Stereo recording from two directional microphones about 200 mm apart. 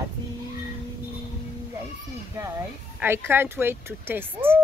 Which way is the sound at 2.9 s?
10° right (ahead or behind).